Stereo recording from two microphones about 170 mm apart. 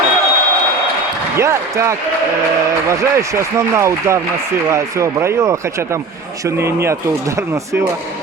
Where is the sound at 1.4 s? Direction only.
15° right (ahead or behind).